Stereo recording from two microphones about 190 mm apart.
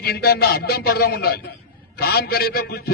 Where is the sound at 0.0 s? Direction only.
55° left (ahead or behind).